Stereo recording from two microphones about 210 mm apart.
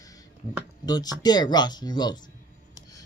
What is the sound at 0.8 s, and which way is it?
Speech, 20° left (ahead or behind).